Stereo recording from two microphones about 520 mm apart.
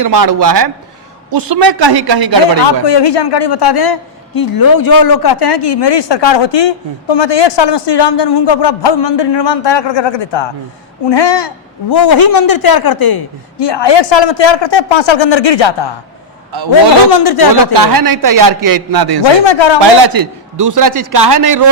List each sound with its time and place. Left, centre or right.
0.0 s a man's voice: right
2.8 s a man's voice: left
16.5 s a man's voice: right
17.2 s a man's voice: left
17.7 s a man's voice: right
19.2 s a man's voice: left
20.0 s a man's voice: right